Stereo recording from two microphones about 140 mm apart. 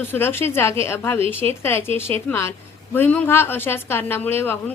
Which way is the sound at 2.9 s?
15° left (ahead or behind).